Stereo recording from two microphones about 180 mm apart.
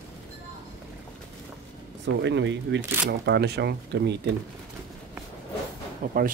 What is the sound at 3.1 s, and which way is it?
Speech, 65° right (ahead or behind).